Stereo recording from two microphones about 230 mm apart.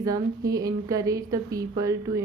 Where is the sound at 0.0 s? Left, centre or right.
Centre.